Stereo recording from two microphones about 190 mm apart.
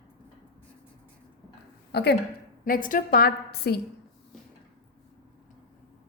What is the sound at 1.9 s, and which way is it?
Speech, 60° left (ahead or behind).